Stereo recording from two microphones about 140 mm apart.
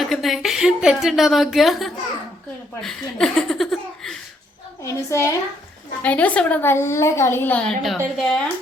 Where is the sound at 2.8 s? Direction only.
Centre (ahead or behind).